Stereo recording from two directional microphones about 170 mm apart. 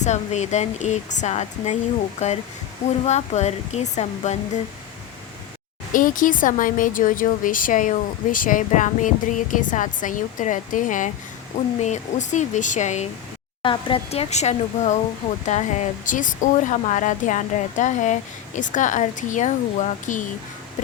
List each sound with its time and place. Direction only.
0.0 s speech: 40° left (ahead or behind)
5.9 s speech: 50° left (ahead or behind)
13.6 s speech: 30° left (ahead or behind); by 20.2 s 45° left (ahead or behind)